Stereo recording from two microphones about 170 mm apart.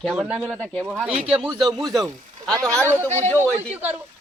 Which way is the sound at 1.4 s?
25° right (ahead or behind).